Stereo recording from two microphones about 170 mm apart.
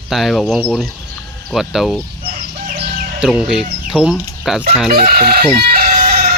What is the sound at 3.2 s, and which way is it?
Speech, 5° right (ahead or behind).